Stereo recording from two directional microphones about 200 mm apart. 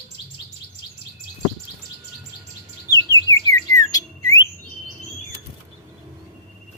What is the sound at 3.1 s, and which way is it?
Bird, 15° left (ahead or behind).